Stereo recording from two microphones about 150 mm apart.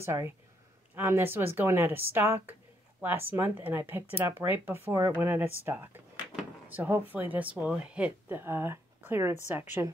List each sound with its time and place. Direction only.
0.0 s speech: 15° right (ahead or behind)